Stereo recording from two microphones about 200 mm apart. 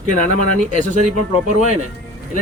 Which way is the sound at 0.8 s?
40° right (ahead or behind).